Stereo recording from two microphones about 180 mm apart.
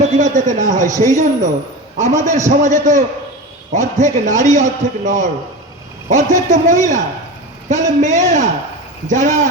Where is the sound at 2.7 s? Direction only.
40° right (ahead or behind).